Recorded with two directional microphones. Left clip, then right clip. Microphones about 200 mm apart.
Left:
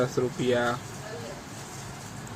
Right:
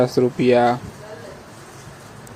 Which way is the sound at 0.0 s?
25° right (ahead or behind).